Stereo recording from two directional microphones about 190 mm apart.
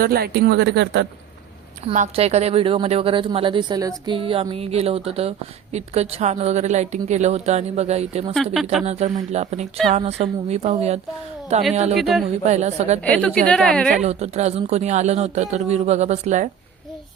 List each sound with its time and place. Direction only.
0.0 s speech: 55° right (ahead or behind)
1.9 s a woman's voice: 35° right (ahead or behind)
11.9 s a woman's voice: centre (ahead or behind)
12.5 s a woman's voice: 35° right (ahead or behind)
13.1 s a woman's voice: 5° left (ahead or behind)
14.0 s a woman's voice: 35° right (ahead or behind)